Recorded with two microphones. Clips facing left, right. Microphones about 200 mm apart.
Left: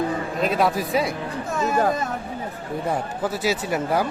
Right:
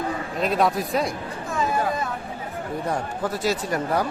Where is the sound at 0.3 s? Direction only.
Centre (ahead or behind).